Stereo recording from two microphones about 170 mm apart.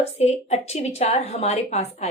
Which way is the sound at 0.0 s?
40° left (ahead or behind).